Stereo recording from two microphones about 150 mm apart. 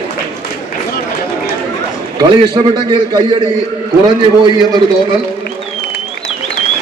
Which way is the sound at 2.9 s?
30° right (ahead or behind).